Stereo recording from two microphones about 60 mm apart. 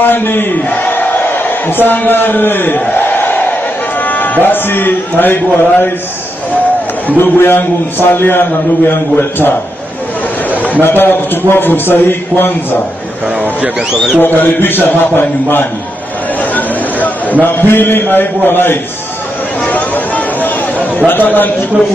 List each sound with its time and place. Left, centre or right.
0.0 s a man's voice: left
7.1 s a man's voice: left
10.6 s a man's voice: left
14.2 s a man's voice: left
17.4 s a man's voice: left
19.7 s a sound: left
21.1 s a man's voice: left